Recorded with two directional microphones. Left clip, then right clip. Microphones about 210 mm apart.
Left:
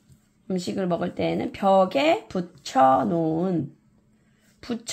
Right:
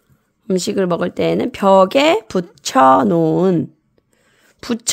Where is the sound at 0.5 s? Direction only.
50° right (ahead or behind).